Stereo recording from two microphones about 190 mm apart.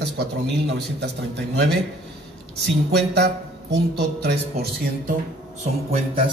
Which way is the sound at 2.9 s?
60° right (ahead or behind).